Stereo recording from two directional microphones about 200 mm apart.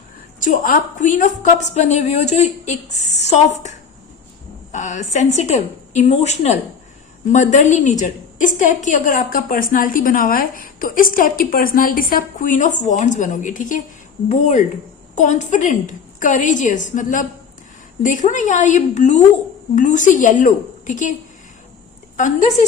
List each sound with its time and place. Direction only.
0.3 s a woman's voice: 40° left (ahead or behind)